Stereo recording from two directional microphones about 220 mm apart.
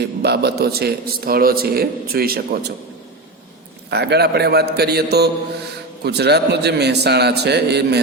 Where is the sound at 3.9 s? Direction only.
50° right (ahead or behind).